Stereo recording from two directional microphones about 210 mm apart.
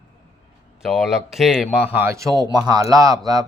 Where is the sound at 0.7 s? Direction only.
Centre (ahead or behind).